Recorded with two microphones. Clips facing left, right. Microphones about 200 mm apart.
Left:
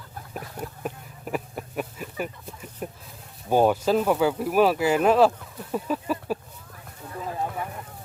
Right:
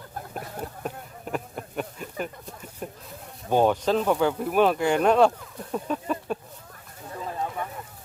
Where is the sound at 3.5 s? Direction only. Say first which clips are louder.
Left 1 dB; 10° left (ahead or behind).